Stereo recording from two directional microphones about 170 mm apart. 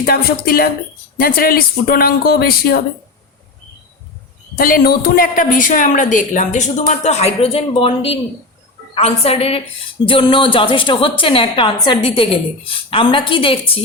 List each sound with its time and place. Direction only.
0.0 s speech: 60° left (ahead or behind)
4.5 s a woman's voice: 60° left (ahead or behind); by 13.6 s 30° left (ahead or behind)